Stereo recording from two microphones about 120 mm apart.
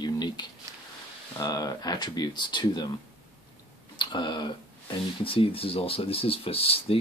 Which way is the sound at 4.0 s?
40° left (ahead or behind).